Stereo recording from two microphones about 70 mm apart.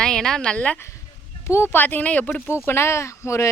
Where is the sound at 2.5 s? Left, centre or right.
Left.